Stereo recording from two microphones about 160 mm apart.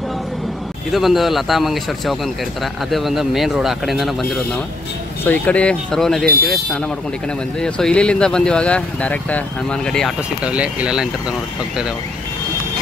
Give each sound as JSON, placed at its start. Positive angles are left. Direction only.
{"t": 0.9, "sound": "speech", "side_deg": 0}
{"t": 5.2, "sound": "speech", "side_deg": 10}
{"t": 6.2, "sound": "speech", "side_deg": -70}
{"t": 7.6, "sound": "speech", "side_deg": 5}
{"t": 10.4, "sound": "speech", "side_deg": -5}